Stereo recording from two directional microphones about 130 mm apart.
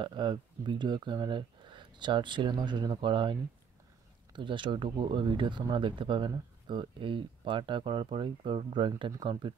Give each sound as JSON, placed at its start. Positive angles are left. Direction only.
{"t": 0.0, "sound": "speech", "side_deg": -40}